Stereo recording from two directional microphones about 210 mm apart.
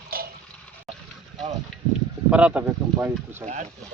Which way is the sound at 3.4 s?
35° right (ahead or behind).